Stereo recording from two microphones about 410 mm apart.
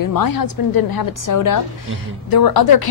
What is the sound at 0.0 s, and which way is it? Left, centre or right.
A woman's voice, left.